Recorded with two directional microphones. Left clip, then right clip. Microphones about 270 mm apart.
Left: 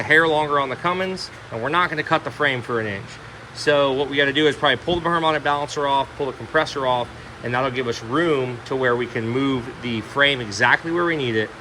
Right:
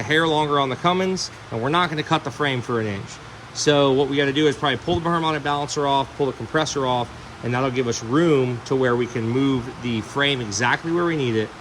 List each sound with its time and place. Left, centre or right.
0.0 s speech: centre